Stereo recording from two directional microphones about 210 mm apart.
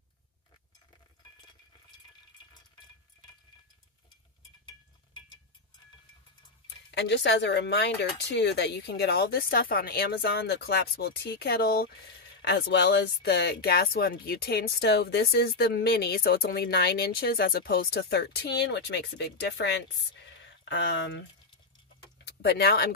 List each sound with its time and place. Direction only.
6.9 s speech: 55° left (ahead or behind)
22.2 s speech: 50° left (ahead or behind)